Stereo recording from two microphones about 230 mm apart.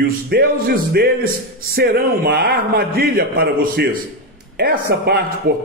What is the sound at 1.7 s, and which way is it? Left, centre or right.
A man's voice, right.